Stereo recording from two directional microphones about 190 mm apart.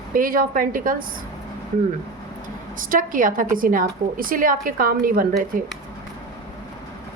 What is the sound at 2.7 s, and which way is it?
A woman's voice, 45° right (ahead or behind).